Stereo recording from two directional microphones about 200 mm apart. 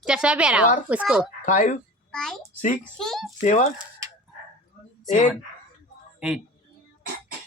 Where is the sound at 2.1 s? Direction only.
Centre (ahead or behind).